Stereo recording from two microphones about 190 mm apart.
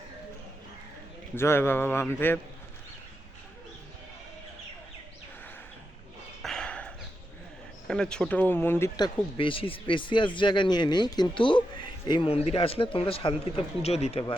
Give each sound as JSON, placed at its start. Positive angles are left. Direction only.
{"t": 1.4, "sound": "speech", "side_deg": 10}
{"t": 6.4, "sound": "a sound", "side_deg": 5}
{"t": 7.9, "sound": "speech", "side_deg": 5}
{"t": 9.0, "sound": "speech", "side_deg": 25}